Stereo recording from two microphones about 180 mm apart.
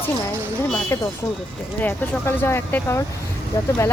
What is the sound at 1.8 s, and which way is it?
Speech, 10° left (ahead or behind).